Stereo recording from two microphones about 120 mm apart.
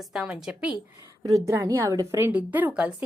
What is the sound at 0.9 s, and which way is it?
A woman's voice, 25° right (ahead or behind).